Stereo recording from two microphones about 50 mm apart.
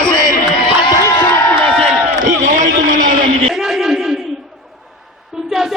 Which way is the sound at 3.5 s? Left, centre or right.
Centre.